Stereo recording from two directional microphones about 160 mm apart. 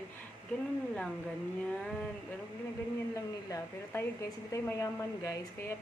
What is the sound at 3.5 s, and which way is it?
A woman's voice, 20° left (ahead or behind).